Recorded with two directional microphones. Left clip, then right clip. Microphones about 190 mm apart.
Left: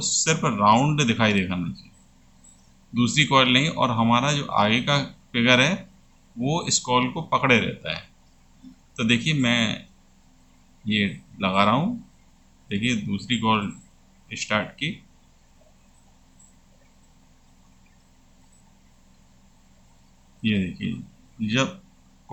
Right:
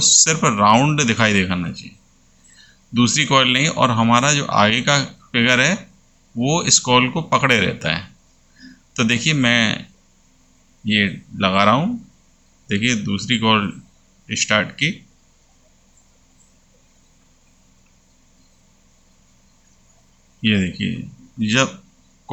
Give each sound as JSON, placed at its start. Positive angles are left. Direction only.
{"t": 0.0, "sound": "speech", "side_deg": -15}
{"t": 2.9, "sound": "speech", "side_deg": -15}
{"t": 10.8, "sound": "speech", "side_deg": -15}
{"t": 20.4, "sound": "speech", "side_deg": -15}